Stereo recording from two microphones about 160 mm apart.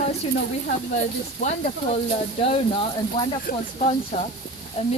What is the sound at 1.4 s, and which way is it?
Speech, 45° left (ahead or behind).